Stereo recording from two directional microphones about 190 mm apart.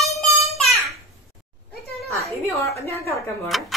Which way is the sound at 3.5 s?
Centre (ahead or behind).